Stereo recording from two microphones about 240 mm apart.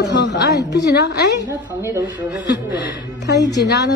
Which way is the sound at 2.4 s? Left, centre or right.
Left.